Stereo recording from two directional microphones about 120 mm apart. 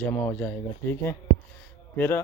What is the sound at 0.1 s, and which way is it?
Speech, 15° left (ahead or behind).